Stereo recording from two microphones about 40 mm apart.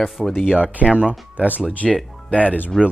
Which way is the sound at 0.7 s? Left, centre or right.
Right.